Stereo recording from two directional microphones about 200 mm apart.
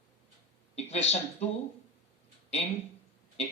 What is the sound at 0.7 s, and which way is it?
Speech, 35° left (ahead or behind).